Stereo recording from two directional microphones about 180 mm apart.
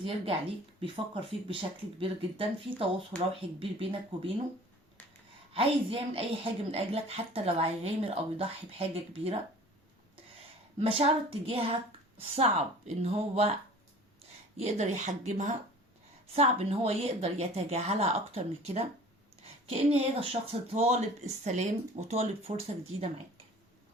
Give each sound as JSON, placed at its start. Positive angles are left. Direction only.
{"t": 0.0, "sound": "a woman's voice", "side_deg": -30}
{"t": 5.5, "sound": "a woman's voice", "side_deg": -30}
{"t": 10.8, "sound": "a woman's voice", "side_deg": -35}
{"t": 14.6, "sound": "a woman's voice", "side_deg": -40}